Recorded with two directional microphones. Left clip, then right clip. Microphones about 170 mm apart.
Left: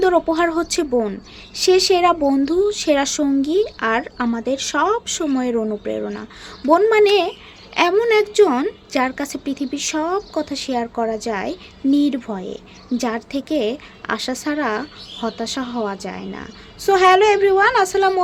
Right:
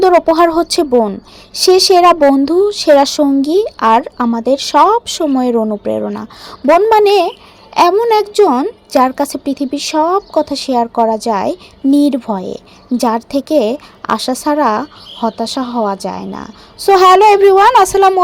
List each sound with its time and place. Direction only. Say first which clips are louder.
0.0 s a woman's voice: right 8 dB; 35° right (ahead or behind)